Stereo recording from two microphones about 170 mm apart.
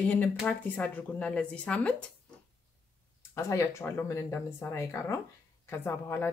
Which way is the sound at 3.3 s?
15° left (ahead or behind).